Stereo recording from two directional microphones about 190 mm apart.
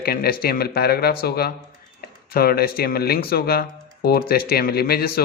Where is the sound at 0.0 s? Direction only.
55° left (ahead or behind).